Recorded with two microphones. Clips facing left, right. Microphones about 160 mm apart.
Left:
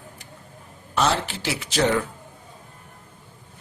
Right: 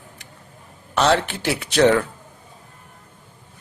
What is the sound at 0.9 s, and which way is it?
Speech, 65° right (ahead or behind).